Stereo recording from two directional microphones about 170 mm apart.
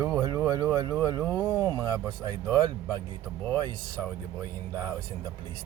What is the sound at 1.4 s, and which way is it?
Speech, 20° right (ahead or behind).